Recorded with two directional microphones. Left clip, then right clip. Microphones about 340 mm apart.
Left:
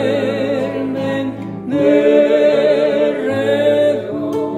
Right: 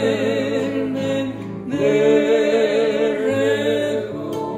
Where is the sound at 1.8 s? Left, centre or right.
Centre.